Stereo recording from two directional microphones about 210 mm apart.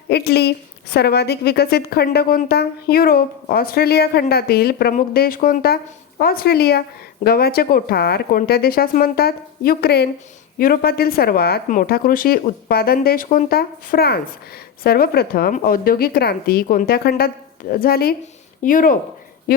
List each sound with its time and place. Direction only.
0.1 s speech: 50° left (ahead or behind)